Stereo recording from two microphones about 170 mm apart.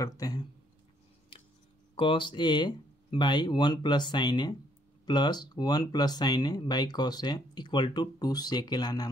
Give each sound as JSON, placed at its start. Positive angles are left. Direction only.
{"t": 0.0, "sound": "speech", "side_deg": 20}
{"t": 2.0, "sound": "speech", "side_deg": 30}